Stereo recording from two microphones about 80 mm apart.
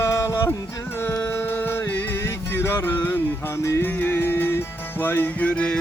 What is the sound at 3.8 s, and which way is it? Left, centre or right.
Music, left.